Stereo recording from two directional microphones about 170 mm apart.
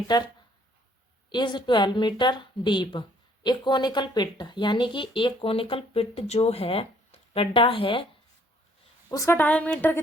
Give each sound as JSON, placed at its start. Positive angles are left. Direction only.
{"t": 0.1, "sound": "a woman's voice", "side_deg": 25}
{"t": 1.3, "sound": "a woman's voice", "side_deg": 25}
{"t": 9.0, "sound": "a woman's voice", "side_deg": 15}